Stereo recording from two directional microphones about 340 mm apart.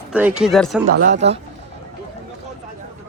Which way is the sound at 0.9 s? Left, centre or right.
Right.